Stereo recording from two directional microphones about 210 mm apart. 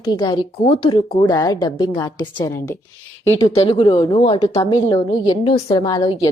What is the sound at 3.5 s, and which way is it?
Speech, 30° left (ahead or behind).